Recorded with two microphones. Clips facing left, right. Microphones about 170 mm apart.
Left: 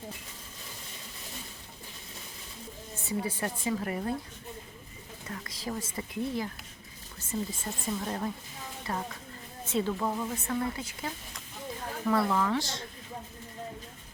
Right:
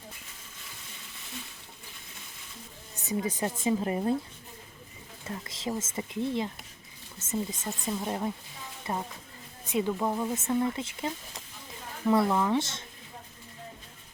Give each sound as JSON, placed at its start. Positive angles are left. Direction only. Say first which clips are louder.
{"t": 3.0, "sound": "speech", "louder": "right 2 dB", "side_deg": -20}
{"t": 5.3, "sound": "speech", "louder": "right 3 dB", "side_deg": -25}